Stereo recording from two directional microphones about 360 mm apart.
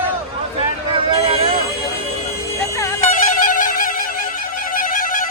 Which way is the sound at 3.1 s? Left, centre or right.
Left.